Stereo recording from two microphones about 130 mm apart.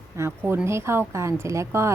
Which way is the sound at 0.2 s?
20° right (ahead or behind).